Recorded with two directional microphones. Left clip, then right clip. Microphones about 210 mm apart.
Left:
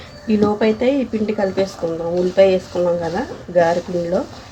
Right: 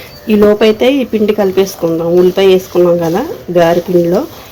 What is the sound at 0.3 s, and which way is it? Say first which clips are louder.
Speech: right 9 dB; 45° right (ahead or behind).